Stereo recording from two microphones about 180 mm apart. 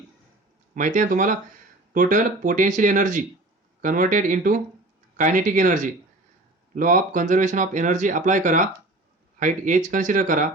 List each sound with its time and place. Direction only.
0.7 s speech: 45° right (ahead or behind)